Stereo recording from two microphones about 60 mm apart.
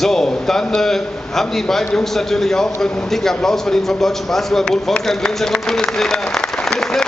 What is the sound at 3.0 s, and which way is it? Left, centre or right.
A man's voice, centre.